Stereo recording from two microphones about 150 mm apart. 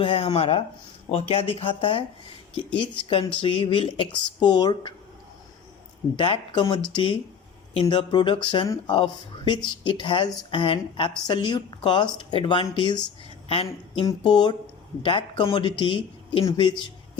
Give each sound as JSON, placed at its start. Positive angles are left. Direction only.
{"t": 0.0, "sound": "speech", "side_deg": 35}
{"t": 6.1, "sound": "speech", "side_deg": 35}
{"t": 8.6, "sound": "speech", "side_deg": 20}
{"t": 15.0, "sound": "speech", "side_deg": 35}